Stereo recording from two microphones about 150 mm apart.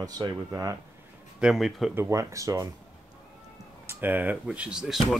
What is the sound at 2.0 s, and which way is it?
Speech, 20° right (ahead or behind).